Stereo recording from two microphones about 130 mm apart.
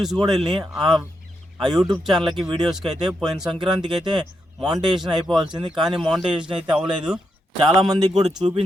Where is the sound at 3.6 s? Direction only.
35° right (ahead or behind).